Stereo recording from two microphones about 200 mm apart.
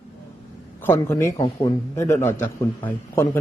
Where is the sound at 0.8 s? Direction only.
10° left (ahead or behind).